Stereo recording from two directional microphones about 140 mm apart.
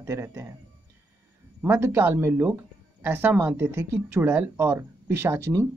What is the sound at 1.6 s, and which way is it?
Speech, 15° right (ahead or behind).